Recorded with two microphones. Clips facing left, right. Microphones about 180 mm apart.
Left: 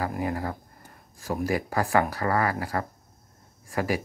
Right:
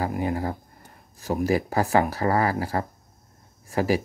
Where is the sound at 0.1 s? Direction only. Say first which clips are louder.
Right 3 dB; 25° right (ahead or behind).